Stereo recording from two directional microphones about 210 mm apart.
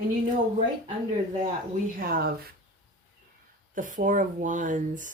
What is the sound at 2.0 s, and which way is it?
Speech, 45° right (ahead or behind).